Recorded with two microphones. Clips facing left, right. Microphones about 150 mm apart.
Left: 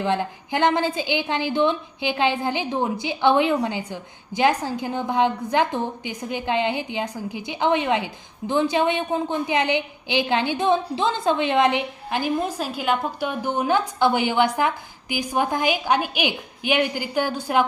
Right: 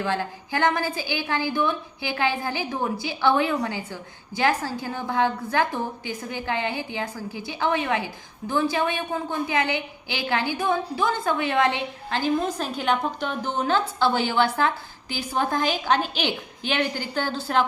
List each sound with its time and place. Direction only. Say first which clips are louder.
0.0 s a woman's voice: left 3 dB; 20° left (ahead or behind)